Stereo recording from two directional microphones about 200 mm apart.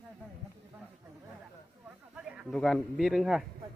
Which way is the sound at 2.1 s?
Centre (ahead or behind).